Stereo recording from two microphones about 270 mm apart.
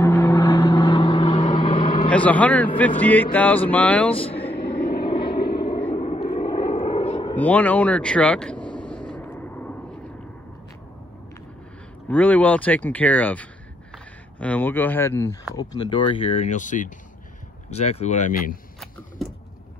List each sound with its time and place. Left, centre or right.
0.0 s vehicle: centre
2.0 s speech: centre
4.1 s speech: centre
4.6 s a sound: centre
5.6 s vehicle: centre
7.3 s vehicle: centre
12.1 s speech: centre; by 18.6 s left